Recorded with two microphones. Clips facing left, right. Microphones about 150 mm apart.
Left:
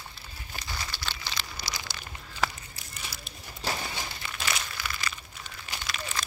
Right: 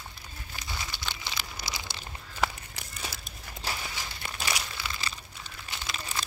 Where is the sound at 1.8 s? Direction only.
25° right (ahead or behind).